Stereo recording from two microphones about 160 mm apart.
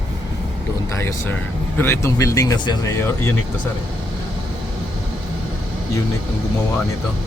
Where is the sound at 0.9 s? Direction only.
15° left (ahead or behind).